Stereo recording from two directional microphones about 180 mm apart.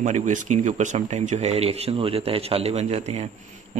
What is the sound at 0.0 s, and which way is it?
A man's voice, 40° right (ahead or behind).